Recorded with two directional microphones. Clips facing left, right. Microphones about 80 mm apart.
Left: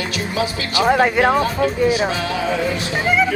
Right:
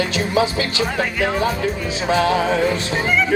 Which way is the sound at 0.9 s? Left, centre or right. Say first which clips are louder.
Left 7 dB; left.